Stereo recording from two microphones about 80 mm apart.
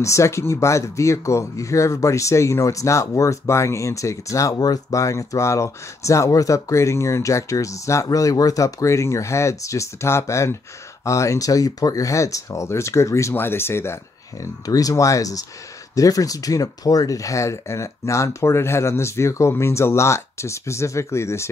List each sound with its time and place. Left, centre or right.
0.0 s speech: left
14.4 s speech: left